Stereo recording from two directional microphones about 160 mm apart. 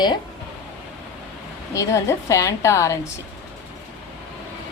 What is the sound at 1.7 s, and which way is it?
A woman's voice, 20° left (ahead or behind).